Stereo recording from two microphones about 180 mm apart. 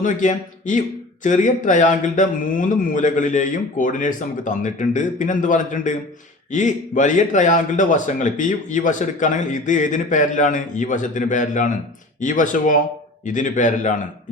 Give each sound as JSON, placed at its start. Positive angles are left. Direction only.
{"t": 0.0, "sound": "a man's voice", "side_deg": 45}